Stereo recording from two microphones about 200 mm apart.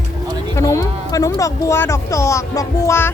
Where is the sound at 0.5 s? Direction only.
15° left (ahead or behind).